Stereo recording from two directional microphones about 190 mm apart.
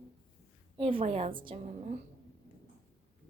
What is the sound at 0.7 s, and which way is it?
A woman's voice, 30° right (ahead or behind).